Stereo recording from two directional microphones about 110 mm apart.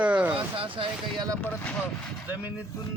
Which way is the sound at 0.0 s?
15° right (ahead or behind).